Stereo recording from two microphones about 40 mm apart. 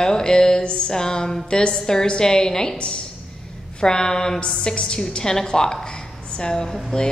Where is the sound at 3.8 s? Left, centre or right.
Centre.